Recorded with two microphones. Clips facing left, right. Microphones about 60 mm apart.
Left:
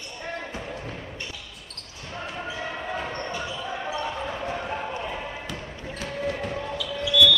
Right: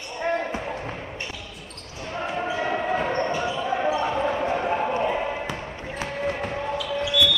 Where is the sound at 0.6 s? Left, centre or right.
Right.